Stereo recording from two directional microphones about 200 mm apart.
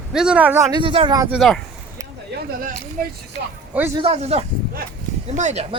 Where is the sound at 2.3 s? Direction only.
55° right (ahead or behind).